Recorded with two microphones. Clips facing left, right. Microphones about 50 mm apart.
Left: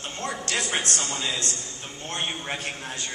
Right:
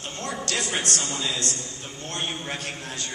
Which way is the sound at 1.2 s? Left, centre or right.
Centre.